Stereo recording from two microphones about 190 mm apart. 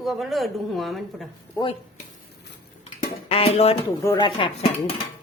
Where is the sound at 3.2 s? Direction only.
30° left (ahead or behind).